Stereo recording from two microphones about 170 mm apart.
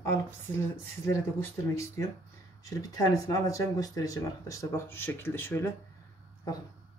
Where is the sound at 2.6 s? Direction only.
20° left (ahead or behind).